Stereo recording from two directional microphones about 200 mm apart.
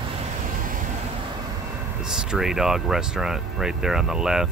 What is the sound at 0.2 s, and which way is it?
Vehicle, 35° right (ahead or behind).